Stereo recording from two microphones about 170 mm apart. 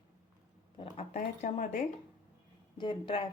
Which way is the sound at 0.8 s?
40° left (ahead or behind).